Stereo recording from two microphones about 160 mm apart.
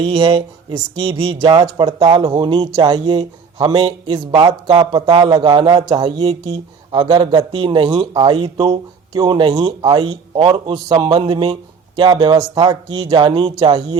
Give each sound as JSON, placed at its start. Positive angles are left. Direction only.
{"t": 0.0, "sound": "speech", "side_deg": -35}